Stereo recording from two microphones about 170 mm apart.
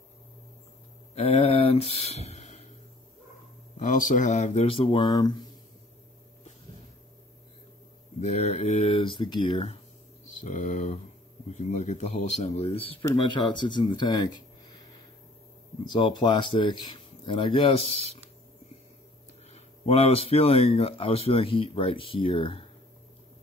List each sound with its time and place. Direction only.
1.1 s speech: 35° left (ahead or behind)
3.7 s speech: 50° left (ahead or behind); by 5.4 s 25° left (ahead or behind)
8.2 s speech: 40° left (ahead or behind)
10.3 s speech: 45° left (ahead or behind); by 14.3 s 25° left (ahead or behind)
15.8 s speech: 25° left (ahead or behind)
19.5 s speech: 35° left (ahead or behind)